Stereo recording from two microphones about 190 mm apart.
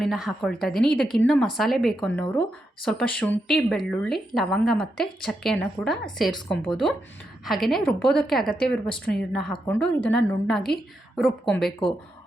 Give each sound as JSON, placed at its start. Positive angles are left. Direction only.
{"t": 0.0, "sound": "a woman's voice", "side_deg": 0}